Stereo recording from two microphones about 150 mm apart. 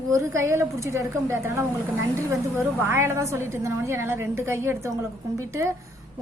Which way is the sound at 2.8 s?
20° right (ahead or behind).